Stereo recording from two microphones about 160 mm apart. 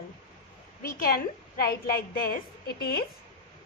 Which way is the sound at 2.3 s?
85° left.